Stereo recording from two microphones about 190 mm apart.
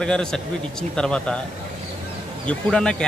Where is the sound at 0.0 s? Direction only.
5° left (ahead or behind).